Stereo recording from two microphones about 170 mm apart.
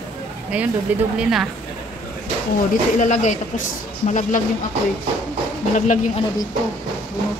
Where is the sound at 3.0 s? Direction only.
45° left (ahead or behind).